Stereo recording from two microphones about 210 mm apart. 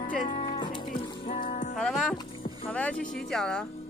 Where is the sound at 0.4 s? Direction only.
20° left (ahead or behind).